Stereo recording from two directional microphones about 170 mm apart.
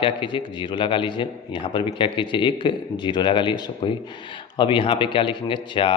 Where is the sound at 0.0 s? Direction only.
30° left (ahead or behind).